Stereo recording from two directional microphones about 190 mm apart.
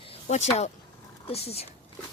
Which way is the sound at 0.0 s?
35° left (ahead or behind).